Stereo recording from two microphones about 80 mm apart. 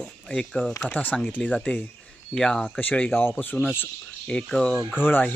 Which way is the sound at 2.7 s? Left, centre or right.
Centre.